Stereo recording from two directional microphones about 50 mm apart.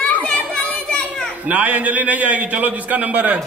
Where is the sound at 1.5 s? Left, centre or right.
Right.